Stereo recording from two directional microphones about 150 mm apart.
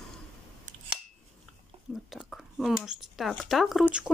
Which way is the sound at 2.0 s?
Centre (ahead or behind).